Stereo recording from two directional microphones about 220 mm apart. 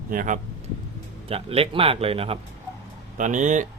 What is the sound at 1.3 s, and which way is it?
Speech, 25° right (ahead or behind).